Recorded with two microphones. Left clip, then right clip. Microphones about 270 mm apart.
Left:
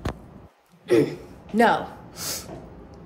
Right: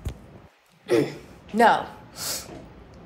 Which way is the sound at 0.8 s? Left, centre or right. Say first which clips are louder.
Left 2 dB; centre.